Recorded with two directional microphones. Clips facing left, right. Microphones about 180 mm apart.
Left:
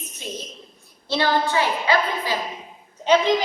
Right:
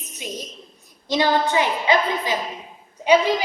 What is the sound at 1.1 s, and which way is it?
A woman's voice, 15° right (ahead or behind).